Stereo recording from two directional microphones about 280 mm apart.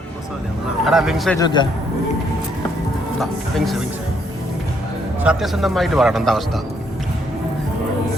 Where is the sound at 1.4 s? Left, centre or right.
Centre.